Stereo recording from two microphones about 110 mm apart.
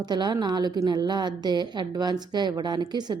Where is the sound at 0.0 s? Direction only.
40° right (ahead or behind).